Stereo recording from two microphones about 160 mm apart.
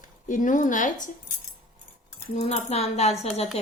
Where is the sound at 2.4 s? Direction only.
45° left (ahead or behind).